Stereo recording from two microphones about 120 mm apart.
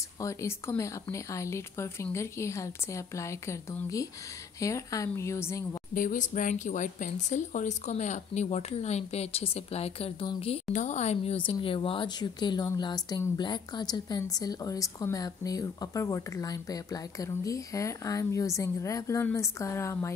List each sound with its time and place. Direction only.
0.2 s a woman's voice: 25° left (ahead or behind)
6.0 s speech: 90° left; by 10.1 s 55° left (ahead or behind)
10.7 s speech: 85° left
11.6 s a woman's voice: 50° left (ahead or behind); by 20.2 s 25° left (ahead or behind)